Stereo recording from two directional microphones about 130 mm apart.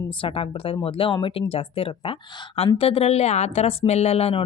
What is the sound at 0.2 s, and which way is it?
A woman's voice, 45° left (ahead or behind).